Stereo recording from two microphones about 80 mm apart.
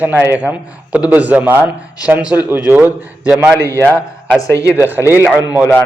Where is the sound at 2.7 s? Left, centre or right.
Right.